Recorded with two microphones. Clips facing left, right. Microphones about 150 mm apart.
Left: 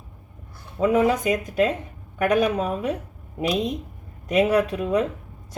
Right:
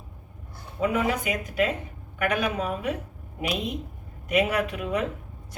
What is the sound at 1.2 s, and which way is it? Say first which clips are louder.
Speech: left 5 dB; 35° left (ahead or behind).